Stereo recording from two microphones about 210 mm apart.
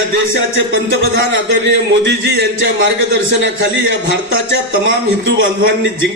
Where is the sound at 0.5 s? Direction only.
65° right (ahead or behind).